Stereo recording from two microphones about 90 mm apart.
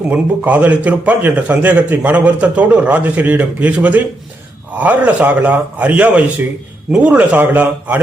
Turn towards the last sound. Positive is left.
turn(degrees=-20)  # may be behind; listen again after turning